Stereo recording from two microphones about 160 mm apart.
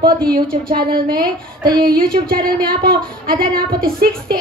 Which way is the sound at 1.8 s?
65° right (ahead or behind).